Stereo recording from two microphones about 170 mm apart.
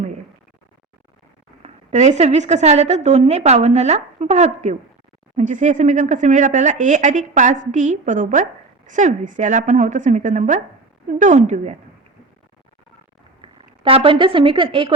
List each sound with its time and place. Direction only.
1.6 s a woman's voice: 45° right (ahead or behind)
13.4 s a woman's voice: 30° right (ahead or behind)